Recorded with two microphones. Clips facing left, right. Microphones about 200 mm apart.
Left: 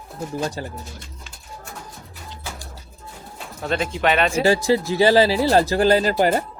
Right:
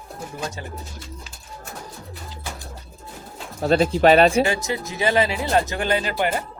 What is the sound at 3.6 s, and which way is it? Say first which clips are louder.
Speech: right 6 dB; 35° right (ahead or behind).